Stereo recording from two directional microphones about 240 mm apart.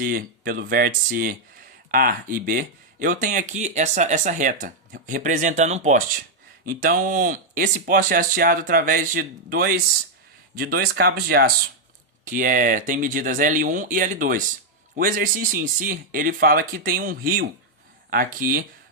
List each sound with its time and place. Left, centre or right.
0.0 s speech: right